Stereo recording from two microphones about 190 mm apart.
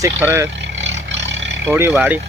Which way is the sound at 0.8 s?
75° right (ahead or behind).